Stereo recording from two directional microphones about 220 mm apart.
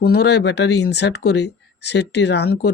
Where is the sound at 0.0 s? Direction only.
45° left (ahead or behind).